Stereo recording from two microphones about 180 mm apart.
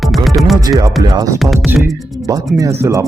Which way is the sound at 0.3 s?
Centre (ahead or behind).